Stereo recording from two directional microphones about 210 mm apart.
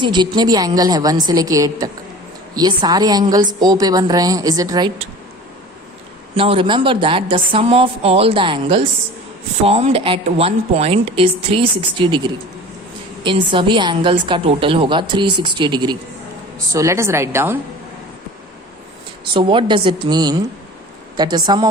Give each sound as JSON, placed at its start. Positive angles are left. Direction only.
{"t": 0.0, "sound": "a woman's voice", "side_deg": -20}
{"t": 6.3, "sound": "a woman's voice", "side_deg": -25}
{"t": 19.2, "sound": "a woman's voice", "side_deg": -25}